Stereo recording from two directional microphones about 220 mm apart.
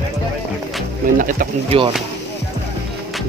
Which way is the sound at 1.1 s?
40° right (ahead or behind).